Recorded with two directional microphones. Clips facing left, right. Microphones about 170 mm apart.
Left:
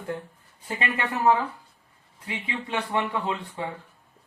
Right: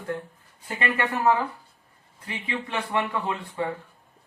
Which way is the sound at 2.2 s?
20° left (ahead or behind).